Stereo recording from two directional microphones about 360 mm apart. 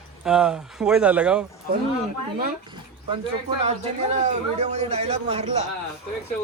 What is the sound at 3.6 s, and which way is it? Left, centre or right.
A man's voice, centre.